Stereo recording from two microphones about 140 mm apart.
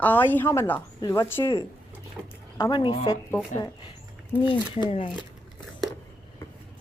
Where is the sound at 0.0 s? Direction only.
15° left (ahead or behind).